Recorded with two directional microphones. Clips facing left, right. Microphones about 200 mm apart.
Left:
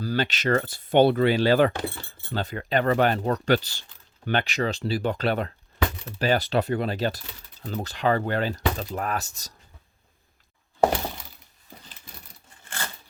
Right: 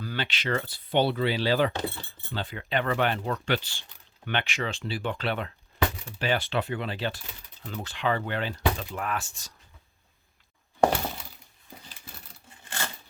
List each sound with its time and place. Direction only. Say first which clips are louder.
0.0 s speech: left 7 dB; 40° left (ahead or behind)